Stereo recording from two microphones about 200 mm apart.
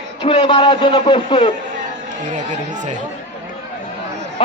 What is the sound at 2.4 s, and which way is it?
Speech, 35° right (ahead or behind).